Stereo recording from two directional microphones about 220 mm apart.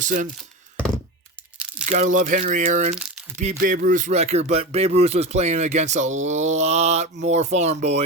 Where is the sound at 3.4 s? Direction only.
35° right (ahead or behind).